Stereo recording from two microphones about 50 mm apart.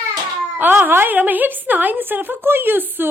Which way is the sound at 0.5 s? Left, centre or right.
Right.